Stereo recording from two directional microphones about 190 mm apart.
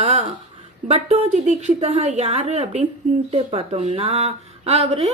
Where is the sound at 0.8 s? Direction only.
35° right (ahead or behind).